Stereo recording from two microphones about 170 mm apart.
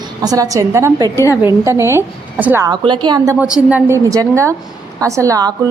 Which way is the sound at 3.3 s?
5° right (ahead or behind).